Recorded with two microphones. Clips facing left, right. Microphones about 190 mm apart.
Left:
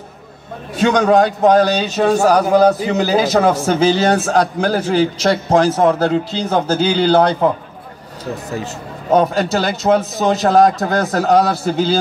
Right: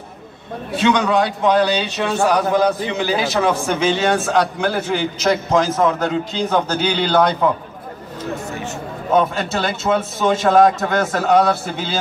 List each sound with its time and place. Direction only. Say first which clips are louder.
0.7 s a man's voice: left 4 dB; 45° left (ahead or behind)
8.5 s a man's voice: left 2 dB; 35° left (ahead or behind)